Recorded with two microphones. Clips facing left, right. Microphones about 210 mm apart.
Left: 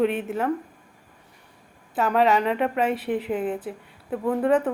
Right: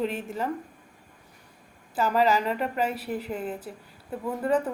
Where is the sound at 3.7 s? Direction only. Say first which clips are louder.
Left 6 dB; 70° left (ahead or behind).